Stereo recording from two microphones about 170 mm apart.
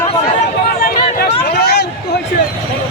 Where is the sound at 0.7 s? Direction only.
65° left (ahead or behind).